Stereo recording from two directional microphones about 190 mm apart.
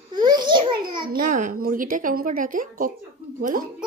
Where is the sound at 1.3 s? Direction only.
45° right (ahead or behind).